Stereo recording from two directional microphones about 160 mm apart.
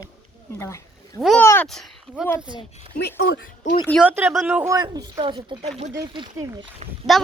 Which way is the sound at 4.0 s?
10° right (ahead or behind).